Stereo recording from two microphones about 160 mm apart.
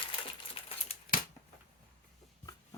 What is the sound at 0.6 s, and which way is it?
Crumpling, 35° left (ahead or behind).